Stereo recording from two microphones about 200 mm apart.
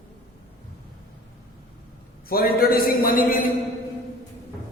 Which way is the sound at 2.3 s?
50° left (ahead or behind).